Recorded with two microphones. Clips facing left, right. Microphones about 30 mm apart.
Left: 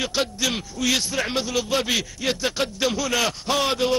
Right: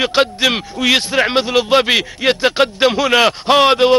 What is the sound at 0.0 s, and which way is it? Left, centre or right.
A man's voice, right.